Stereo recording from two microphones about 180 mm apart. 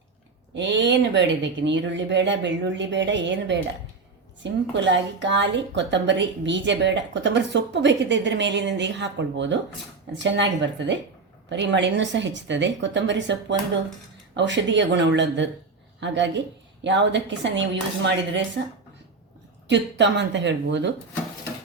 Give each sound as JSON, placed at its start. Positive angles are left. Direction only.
{"t": 0.5, "sound": "a woman's voice", "side_deg": -80}
{"t": 4.7, "sound": "a woman's voice", "side_deg": -85}
{"t": 19.6, "sound": "a woman's voice", "side_deg": -80}